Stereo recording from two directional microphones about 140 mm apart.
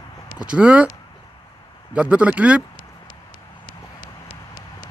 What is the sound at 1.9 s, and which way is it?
Speech, 10° right (ahead or behind).